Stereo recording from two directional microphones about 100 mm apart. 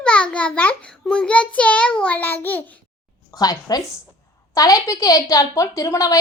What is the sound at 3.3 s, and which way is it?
A woman's voice, 40° left (ahead or behind).